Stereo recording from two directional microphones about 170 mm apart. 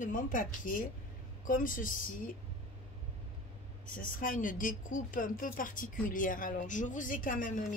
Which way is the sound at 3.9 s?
55° left (ahead or behind).